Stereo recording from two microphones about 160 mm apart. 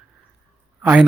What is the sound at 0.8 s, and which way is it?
Speech, 10° right (ahead or behind).